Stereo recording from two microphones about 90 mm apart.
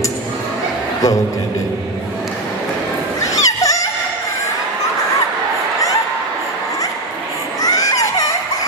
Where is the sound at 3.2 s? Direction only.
40° left (ahead or behind).